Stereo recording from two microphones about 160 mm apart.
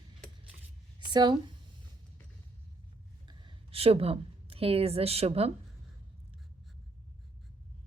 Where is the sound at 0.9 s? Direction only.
30° right (ahead or behind).